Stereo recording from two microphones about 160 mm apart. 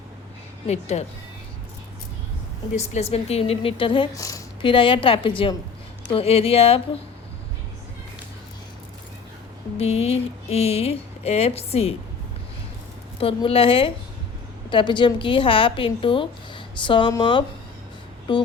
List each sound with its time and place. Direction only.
0.7 s speech: 45° left (ahead or behind)
2.7 s speech: 40° left (ahead or behind)
4.1 s a woman's voice: 20° left (ahead or behind)
4.6 s speech: 35° left (ahead or behind)
9.7 s speech: 40° left (ahead or behind)
13.1 s speech: 35° left (ahead or behind)